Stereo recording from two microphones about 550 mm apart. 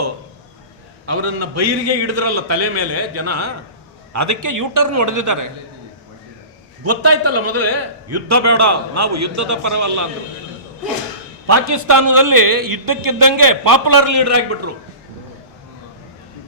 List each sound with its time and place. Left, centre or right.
1.0 s a man's voice: right
6.8 s a man's voice: right
11.4 s a man's voice: right